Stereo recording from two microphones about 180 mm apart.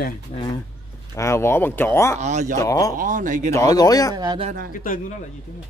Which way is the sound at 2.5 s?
20° left (ahead or behind).